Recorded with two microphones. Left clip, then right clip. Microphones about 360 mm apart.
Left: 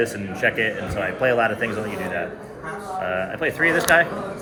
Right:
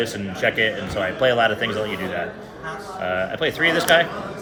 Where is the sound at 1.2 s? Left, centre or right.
Right.